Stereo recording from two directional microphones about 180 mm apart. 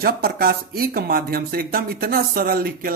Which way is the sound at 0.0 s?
55° right (ahead or behind).